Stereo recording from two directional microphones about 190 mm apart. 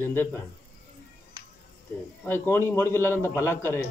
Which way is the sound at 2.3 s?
15° left (ahead or behind).